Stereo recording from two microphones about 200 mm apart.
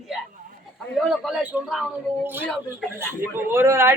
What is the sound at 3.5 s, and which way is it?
Speech, 15° right (ahead or behind).